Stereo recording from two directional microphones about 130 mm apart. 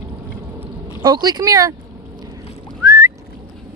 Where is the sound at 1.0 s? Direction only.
35° right (ahead or behind).